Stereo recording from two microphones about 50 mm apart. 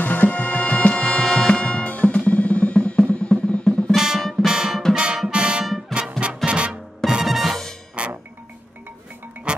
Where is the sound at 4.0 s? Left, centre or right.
Centre.